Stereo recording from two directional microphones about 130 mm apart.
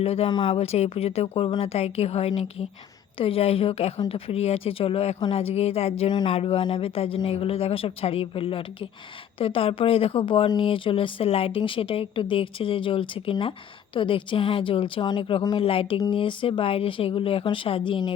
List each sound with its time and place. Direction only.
0.0 s a woman's voice: 50° left (ahead or behind)
0.3 s a woman's voice: 40° left (ahead or behind)
6.1 s a woman's voice: 40° left (ahead or behind)